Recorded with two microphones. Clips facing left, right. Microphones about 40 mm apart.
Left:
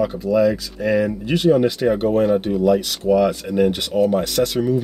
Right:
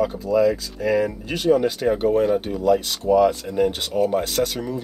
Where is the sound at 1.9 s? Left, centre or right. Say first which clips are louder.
Even; left.